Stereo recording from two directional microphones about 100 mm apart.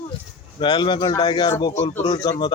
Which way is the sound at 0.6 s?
50° left (ahead or behind).